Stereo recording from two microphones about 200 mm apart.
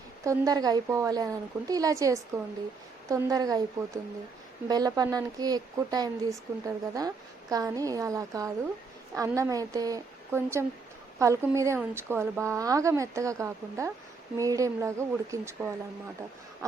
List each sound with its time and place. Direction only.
0.3 s a woman's voice: 20° right (ahead or behind)